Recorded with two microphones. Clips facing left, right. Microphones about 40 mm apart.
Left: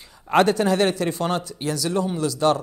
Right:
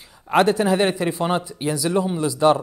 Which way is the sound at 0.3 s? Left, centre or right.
Centre.